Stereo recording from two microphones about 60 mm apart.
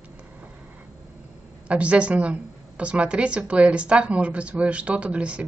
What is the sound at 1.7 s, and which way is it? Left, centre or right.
A woman's voice, right.